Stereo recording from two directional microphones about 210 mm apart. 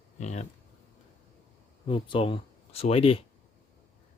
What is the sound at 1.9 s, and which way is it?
Speech, 25° left (ahead or behind).